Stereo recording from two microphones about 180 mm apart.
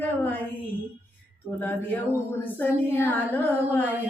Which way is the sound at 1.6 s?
10° left (ahead or behind).